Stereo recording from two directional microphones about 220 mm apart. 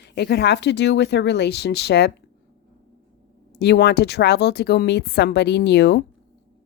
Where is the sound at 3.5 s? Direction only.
50° left (ahead or behind).